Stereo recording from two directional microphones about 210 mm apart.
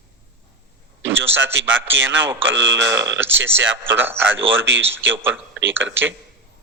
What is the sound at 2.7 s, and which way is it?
Speech, 15° right (ahead or behind).